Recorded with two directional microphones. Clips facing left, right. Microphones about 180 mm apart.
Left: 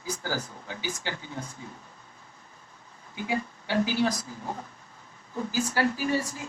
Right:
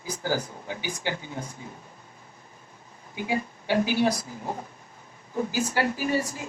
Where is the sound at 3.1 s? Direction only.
15° right (ahead or behind).